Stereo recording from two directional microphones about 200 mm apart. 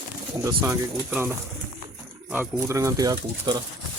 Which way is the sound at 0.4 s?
15° right (ahead or behind).